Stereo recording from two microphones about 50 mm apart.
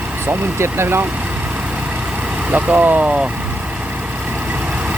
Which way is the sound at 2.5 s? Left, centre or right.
Right.